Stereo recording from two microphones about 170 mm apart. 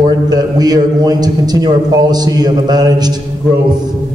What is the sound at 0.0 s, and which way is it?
A man's voice, 25° right (ahead or behind).